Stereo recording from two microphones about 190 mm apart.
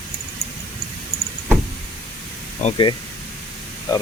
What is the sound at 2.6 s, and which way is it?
Speech, 40° left (ahead or behind).